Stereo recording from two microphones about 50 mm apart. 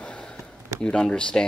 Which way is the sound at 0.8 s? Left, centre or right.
Centre.